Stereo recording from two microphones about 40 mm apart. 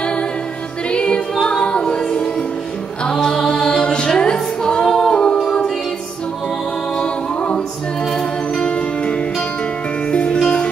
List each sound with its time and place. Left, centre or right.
0.8 s music: left
7.0 s music: left
7.5 s music: centre
8.5 s music: left